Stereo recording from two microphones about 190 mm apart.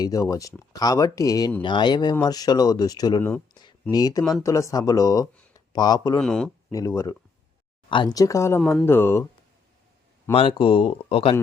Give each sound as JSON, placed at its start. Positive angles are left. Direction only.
{"t": 0.0, "sound": "speech", "side_deg": 20}
{"t": 3.5, "sound": "a sound", "side_deg": 25}
{"t": 3.9, "sound": "speech", "side_deg": 20}
{"t": 4.2, "sound": "speech", "side_deg": 5}
{"t": 4.4, "sound": "speech", "side_deg": 15}
{"t": 6.1, "sound": "speech", "side_deg": 5}
{"t": 6.7, "sound": "speech", "side_deg": 15}
{"t": 10.3, "sound": "speech", "side_deg": 25}